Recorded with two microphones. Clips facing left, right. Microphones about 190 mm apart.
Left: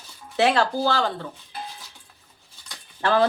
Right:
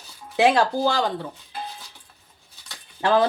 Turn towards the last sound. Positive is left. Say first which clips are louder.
# right 2 dB
turn(degrees=-15)  # may be behind; listen again after turning